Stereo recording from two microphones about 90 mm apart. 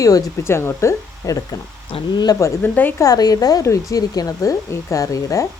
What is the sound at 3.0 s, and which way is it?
Stir, 45° left (ahead or behind).